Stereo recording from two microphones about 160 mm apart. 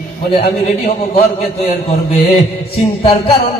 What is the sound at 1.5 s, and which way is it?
Speech, 40° left (ahead or behind).